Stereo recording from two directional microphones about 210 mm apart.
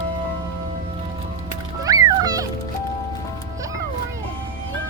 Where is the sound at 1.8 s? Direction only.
15° right (ahead or behind).